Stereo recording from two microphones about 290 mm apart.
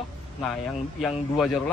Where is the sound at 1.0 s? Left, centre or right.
Centre.